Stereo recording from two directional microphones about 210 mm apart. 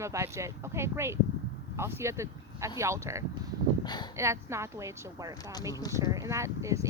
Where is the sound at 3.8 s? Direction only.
20° left (ahead or behind).